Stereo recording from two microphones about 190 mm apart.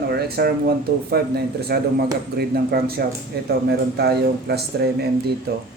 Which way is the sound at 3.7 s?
55° right (ahead or behind).